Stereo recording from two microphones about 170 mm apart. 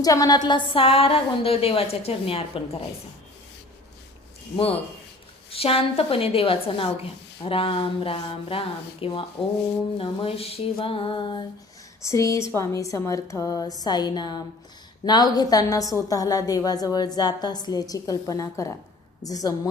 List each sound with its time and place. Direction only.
0.0 s a woman's voice: 20° left (ahead or behind)
4.5 s a woman's voice: 35° left (ahead or behind)
12.0 s a woman's voice: 20° left (ahead or behind)